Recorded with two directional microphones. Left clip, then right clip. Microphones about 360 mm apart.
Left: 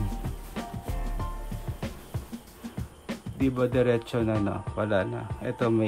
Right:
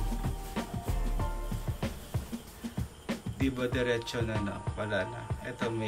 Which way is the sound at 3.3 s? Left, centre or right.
Centre.